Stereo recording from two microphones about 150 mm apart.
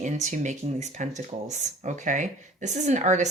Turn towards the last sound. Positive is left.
turn(degrees=-50)  # may be behind; listen again after turning